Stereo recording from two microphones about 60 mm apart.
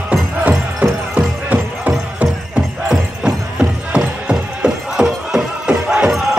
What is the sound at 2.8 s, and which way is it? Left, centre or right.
Music, centre.